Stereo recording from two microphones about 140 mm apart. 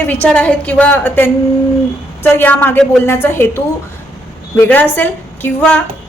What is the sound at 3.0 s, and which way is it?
A woman's voice, 15° left (ahead or behind).